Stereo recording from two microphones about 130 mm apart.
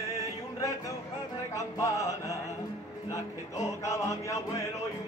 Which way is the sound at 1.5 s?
25° left (ahead or behind).